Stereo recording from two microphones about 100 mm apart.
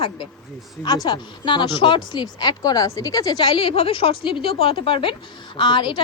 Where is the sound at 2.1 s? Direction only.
45° left (ahead or behind).